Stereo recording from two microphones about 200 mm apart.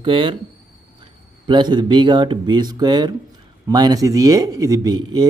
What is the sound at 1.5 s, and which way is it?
Speech, 20° right (ahead or behind).